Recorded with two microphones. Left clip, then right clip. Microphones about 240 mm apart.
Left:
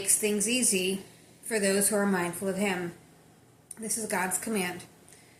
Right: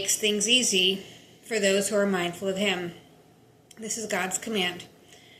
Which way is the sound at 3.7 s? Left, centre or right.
Centre.